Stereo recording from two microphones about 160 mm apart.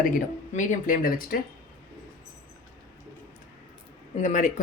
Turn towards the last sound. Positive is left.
turn(degrees=50)  # may be behind; listen again after turning